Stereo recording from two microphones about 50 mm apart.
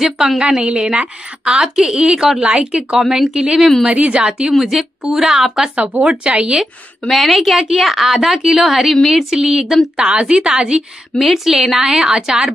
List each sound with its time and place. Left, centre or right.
0.0 s a woman's voice: centre
0.4 s a woman's voice: centre
3.0 s a woman's voice: centre
3.8 s a woman's voice: right
4.5 s a woman's voice: centre
5.8 s a woman's voice: right
7.1 s a woman's voice: centre
9.9 s a woman's voice: centre
11.1 s a woman's voice: centre